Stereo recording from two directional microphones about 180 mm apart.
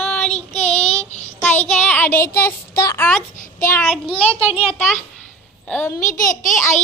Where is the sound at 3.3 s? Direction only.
50° left (ahead or behind).